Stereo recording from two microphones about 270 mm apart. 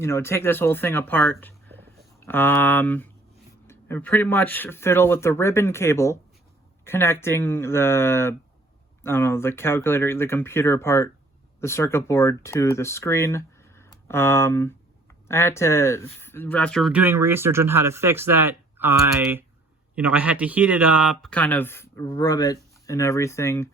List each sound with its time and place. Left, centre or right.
0.0 s speech: centre